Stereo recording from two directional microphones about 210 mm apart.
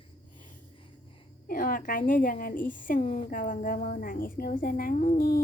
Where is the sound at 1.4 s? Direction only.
40° left (ahead or behind).